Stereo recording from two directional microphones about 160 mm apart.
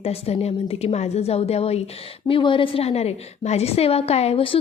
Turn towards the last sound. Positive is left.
turn(degrees=35)  # may be behind; listen again after turning